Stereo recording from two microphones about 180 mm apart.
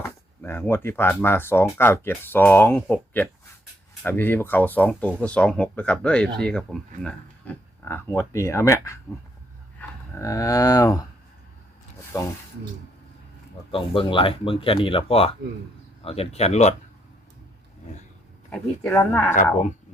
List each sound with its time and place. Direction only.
0.0 s speech: 15° left (ahead or behind)
10.2 s speech: 15° left (ahead or behind)
12.1 s speech: 15° left (ahead or behind)
13.7 s speech: 30° left (ahead or behind)
18.5 s speech: 10° left (ahead or behind)